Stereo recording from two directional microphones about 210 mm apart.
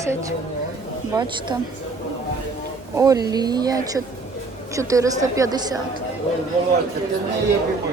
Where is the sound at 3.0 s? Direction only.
15° right (ahead or behind).